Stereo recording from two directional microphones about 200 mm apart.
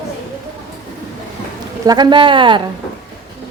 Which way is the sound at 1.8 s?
20° right (ahead or behind).